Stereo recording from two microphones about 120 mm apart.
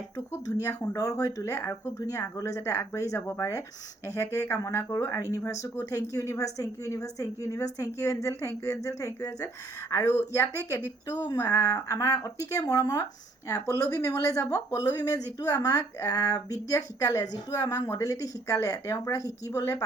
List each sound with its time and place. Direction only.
0.3 s speech: 25° left (ahead or behind)
11.3 s speech: 30° left (ahead or behind)